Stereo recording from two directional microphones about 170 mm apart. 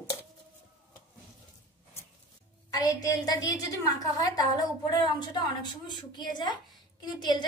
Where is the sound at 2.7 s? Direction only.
20° left (ahead or behind).